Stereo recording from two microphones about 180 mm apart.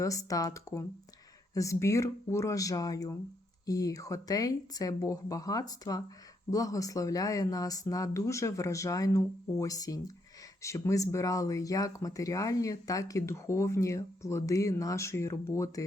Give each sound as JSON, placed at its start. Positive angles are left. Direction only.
{"t": 0.0, "sound": "speech", "side_deg": 20}